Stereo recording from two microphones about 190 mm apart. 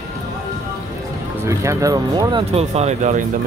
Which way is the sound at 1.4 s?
15° right (ahead or behind).